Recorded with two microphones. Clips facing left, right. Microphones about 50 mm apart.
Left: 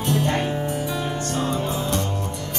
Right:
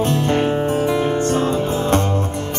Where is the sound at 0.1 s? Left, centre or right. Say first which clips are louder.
Right 5 dB; right.